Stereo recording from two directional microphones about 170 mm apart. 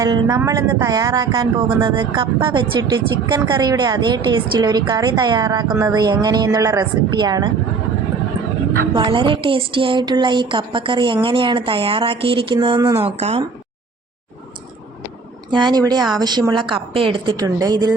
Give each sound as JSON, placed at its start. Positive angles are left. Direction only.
{"t": 0.0, "sound": "speech", "side_deg": -20}
{"t": 9.0, "sound": "speech", "side_deg": -30}
{"t": 13.0, "sound": "speech", "side_deg": -35}
{"t": 15.4, "sound": "speech", "side_deg": -25}